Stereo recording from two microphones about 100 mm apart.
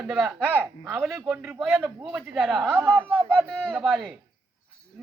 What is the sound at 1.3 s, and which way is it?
Speech, 20° right (ahead or behind).